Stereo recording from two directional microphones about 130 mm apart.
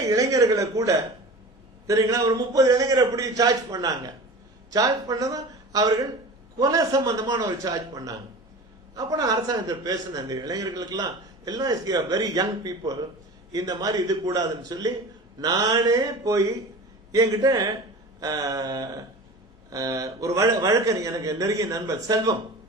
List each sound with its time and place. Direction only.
0.0 s a man's voice: 25° right (ahead or behind)